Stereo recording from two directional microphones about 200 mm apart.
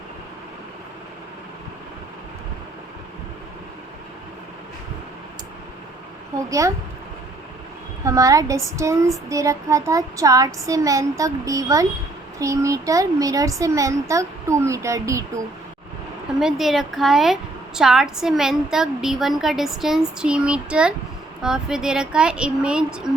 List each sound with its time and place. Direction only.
6.5 s speech: 15° right (ahead or behind)
8.0 s speech: 15° right (ahead or behind)
16.4 s a woman's voice: centre (ahead or behind)